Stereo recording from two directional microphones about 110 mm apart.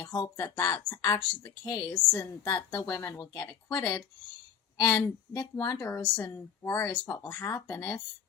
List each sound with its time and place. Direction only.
0.0 s a woman's voice: 35° left (ahead or behind)